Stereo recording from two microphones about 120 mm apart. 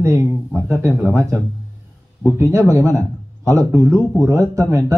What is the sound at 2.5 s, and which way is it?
Speech, 25° right (ahead or behind).